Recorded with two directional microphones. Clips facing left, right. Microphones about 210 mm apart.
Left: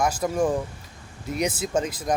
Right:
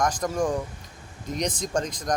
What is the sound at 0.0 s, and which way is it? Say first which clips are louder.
Speech: left 2 dB; 5° left (ahead or behind).